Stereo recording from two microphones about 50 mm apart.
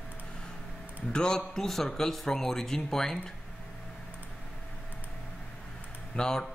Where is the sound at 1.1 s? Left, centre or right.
Centre.